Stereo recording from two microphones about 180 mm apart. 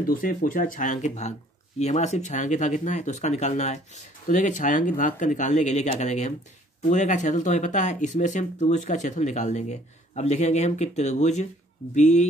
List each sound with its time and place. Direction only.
0.0 s speech: 50° left (ahead or behind)